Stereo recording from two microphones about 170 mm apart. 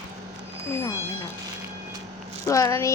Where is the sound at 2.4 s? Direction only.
20° left (ahead or behind).